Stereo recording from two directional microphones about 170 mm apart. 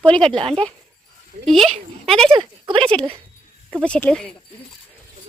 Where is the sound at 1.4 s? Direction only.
Centre (ahead or behind).